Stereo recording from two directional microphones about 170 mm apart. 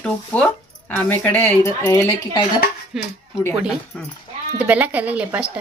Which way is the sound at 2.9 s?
5° right (ahead or behind).